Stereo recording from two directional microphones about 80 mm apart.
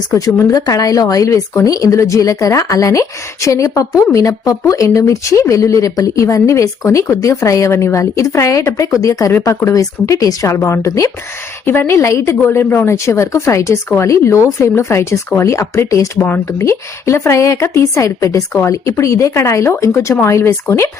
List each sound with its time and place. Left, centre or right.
0.3 s a woman's voice: left
11.6 s a woman's voice: left